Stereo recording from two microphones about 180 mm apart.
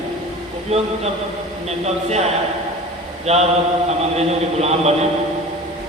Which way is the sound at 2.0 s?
35° right (ahead or behind).